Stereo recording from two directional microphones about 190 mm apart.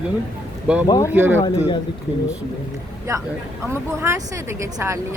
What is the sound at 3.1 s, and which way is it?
Speech, 15° right (ahead or behind).